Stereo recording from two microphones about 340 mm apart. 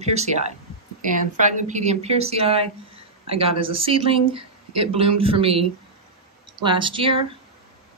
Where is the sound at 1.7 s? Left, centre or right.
Centre.